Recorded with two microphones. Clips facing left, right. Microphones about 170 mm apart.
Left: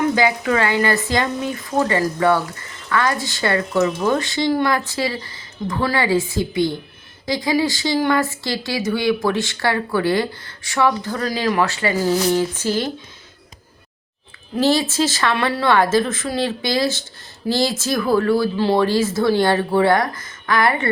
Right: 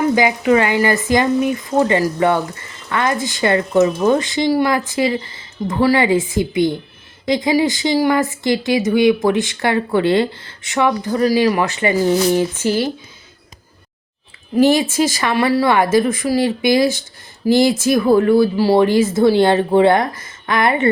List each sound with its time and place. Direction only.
0.0 s speech: 15° right (ahead or behind)
14.6 s speech: 15° right (ahead or behind)